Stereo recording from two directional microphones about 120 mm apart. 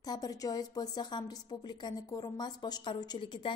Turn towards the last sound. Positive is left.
turn(degrees=45)  # may be behind; listen again after turning